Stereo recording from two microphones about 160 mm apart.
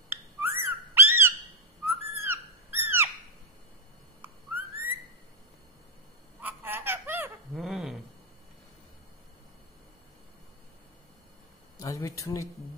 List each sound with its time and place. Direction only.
0.1 s bird: 15° right (ahead or behind)
1.9 s owl: 15° right (ahead or behind)
4.2 s whistling: 15° right (ahead or behind)
6.4 s laughter: 15° right (ahead or behind)
7.5 s a sound: centre (ahead or behind)
11.8 s speech: 20° left (ahead or behind)